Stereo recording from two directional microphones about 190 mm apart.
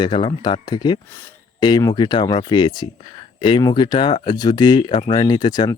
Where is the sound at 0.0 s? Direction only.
25° left (ahead or behind).